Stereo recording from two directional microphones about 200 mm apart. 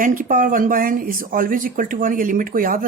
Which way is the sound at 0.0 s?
45° right (ahead or behind).